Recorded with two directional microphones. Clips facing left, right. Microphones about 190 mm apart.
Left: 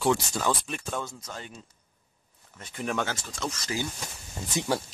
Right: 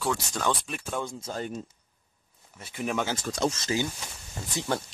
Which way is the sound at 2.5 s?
5° right (ahead or behind).